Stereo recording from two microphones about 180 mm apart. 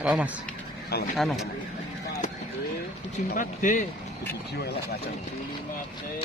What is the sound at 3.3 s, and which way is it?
Speech, 45° left (ahead or behind).